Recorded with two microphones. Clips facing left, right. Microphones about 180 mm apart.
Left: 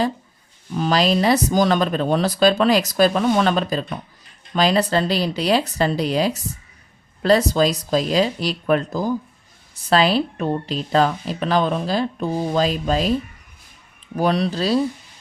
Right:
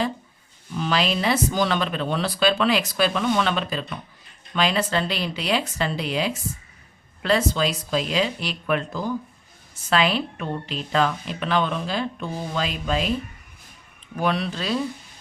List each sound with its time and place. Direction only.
0.7 s speech: 40° left (ahead or behind)
14.2 s speech: 35° left (ahead or behind)